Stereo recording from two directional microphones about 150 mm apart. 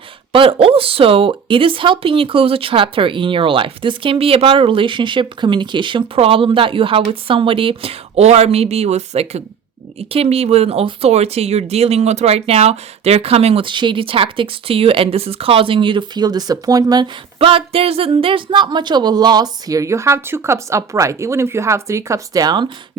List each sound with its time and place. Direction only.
0.3 s speech: 35° right (ahead or behind)